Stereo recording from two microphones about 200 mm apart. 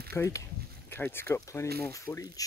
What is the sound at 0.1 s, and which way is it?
Speech, 15° left (ahead or behind).